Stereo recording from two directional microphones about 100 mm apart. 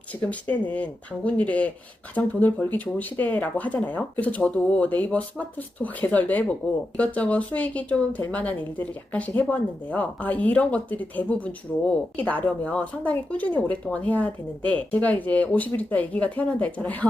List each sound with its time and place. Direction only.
0.2 s speech: 15° left (ahead or behind)